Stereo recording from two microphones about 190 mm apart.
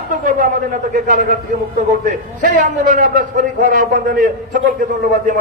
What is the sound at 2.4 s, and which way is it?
A man's voice, 45° right (ahead or behind).